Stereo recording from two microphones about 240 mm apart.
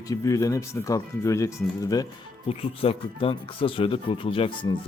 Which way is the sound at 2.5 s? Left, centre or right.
Left.